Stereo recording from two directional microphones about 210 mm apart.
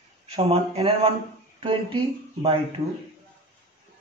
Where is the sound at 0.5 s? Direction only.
30° right (ahead or behind).